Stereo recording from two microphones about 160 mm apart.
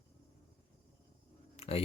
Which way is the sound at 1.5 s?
40° left (ahead or behind).